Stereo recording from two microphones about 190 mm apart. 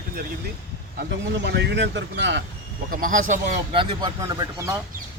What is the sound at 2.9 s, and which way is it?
Speech, 45° right (ahead or behind).